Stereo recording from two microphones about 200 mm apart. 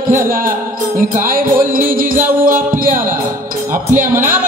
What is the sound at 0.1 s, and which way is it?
Music, 45° right (ahead or behind).